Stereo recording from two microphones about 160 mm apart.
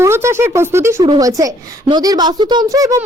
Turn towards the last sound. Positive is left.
turn(degrees=-20)  # may be behind; listen again after turning